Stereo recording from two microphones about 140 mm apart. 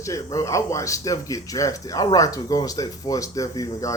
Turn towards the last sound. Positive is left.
turn(degrees=25)  # may be behind; listen again after turning